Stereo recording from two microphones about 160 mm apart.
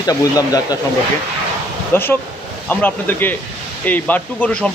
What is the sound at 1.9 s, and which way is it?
Speech, 15° left (ahead or behind).